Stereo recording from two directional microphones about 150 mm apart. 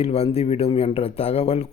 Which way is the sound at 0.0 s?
45° left (ahead or behind).